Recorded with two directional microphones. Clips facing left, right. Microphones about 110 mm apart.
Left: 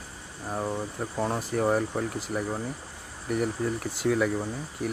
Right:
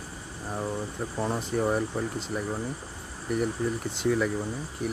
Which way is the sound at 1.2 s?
5° left (ahead or behind).